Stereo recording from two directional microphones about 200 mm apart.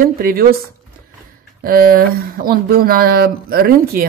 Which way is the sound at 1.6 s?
45° right (ahead or behind).